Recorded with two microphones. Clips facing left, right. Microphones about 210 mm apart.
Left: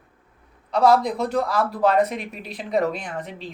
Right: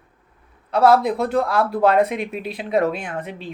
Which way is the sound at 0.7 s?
5° right (ahead or behind).